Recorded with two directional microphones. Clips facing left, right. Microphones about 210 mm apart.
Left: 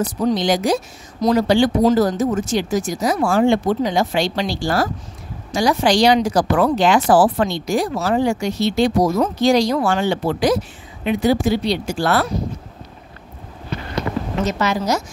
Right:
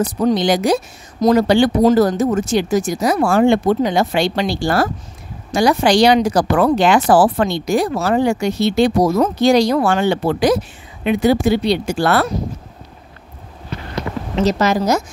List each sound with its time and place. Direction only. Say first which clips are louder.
0.0 s speech: right 3 dB; 60° right (ahead or behind)
14.4 s speech: right 6 dB; 40° right (ahead or behind)